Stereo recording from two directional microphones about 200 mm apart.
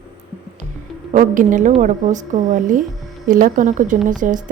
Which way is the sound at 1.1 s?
40° right (ahead or behind).